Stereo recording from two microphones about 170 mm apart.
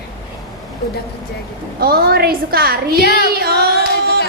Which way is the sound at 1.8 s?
60° right (ahead or behind).